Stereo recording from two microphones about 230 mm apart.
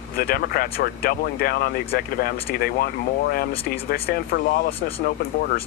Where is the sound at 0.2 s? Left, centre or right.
Left.